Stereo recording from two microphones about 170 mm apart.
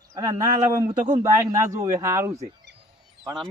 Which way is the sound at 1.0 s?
20° right (ahead or behind).